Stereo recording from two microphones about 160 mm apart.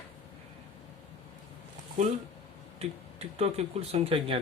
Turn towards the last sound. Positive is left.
turn(degrees=-35)  # may be behind; listen again after turning